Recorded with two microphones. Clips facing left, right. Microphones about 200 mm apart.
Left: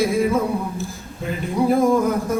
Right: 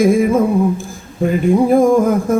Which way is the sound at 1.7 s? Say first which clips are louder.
Right 6 dB; 50° right (ahead or behind).